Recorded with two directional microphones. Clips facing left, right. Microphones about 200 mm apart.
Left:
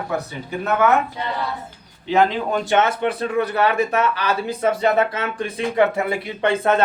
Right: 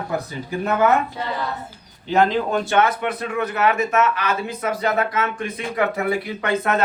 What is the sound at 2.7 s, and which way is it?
A man's voice, 25° left (ahead or behind).